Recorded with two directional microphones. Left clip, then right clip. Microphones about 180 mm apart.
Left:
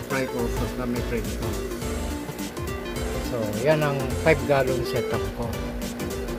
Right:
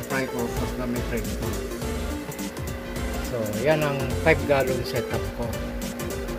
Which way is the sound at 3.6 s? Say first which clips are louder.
Left 1 dB; 5° left (ahead or behind).